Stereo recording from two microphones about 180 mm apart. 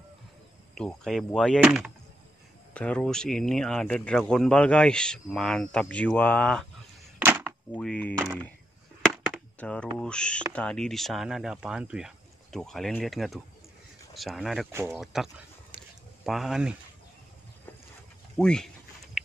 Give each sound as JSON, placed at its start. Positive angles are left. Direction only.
{"t": 0.7, "sound": "speech", "side_deg": 5}
{"t": 7.2, "sound": "cap gun", "side_deg": -10}
{"t": 7.7, "sound": "speech", "side_deg": 5}
{"t": 14.7, "sound": "speech", "side_deg": -15}
{"t": 15.0, "sound": "speech", "side_deg": 0}
{"t": 15.7, "sound": "a sound", "side_deg": 10}
{"t": 16.3, "sound": "speech", "side_deg": 0}
{"t": 18.4, "sound": "speech", "side_deg": 5}
{"t": 19.2, "sound": "a sound", "side_deg": 0}